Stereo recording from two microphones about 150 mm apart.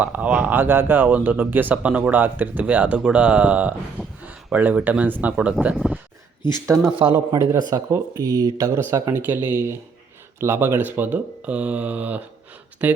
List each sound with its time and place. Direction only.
0.0 s speech: 10° right (ahead or behind)
6.9 s speech: 30° right (ahead or behind); by 13.0 s 10° right (ahead or behind)